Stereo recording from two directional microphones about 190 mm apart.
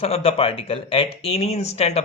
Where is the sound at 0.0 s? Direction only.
30° left (ahead or behind).